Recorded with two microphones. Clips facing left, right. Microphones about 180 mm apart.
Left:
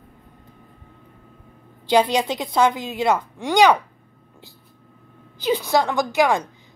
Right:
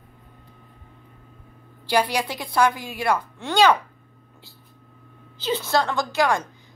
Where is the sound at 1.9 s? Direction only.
20° left (ahead or behind).